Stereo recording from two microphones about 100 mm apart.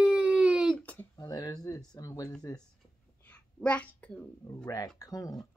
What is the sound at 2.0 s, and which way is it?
Speech, 35° left (ahead or behind).